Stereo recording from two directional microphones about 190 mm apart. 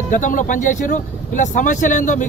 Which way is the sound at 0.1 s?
45° left (ahead or behind).